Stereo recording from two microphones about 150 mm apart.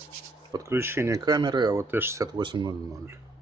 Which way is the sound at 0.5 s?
20° right (ahead or behind).